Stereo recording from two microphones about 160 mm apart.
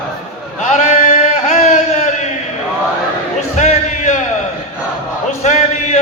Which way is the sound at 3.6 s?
45° left (ahead or behind).